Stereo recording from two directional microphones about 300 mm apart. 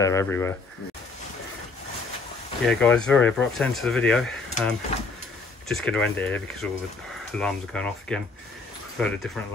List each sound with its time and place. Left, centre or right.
0.0 s speech: centre
2.6 s speech: centre